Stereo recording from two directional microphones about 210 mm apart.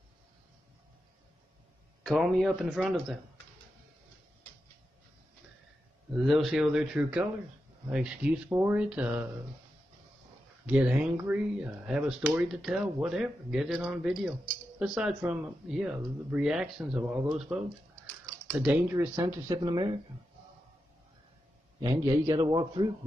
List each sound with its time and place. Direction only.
2.0 s speech: centre (ahead or behind)
6.1 s speech: centre (ahead or behind)
10.7 s speech: 5° right (ahead or behind)
18.5 s speech: 5° right (ahead or behind); by 20.0 s 20° right (ahead or behind)
22.1 s a man's voice: 15° right (ahead or behind)